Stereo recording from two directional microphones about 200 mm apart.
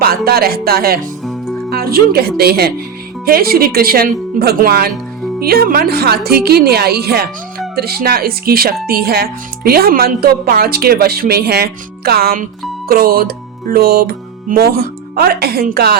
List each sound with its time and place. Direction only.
0.0 s speech: 50° right (ahead or behind)
1.2 s music: centre (ahead or behind)
1.7 s speech: 50° right (ahead or behind)